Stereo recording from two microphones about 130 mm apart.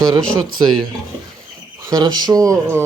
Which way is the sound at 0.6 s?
35° right (ahead or behind).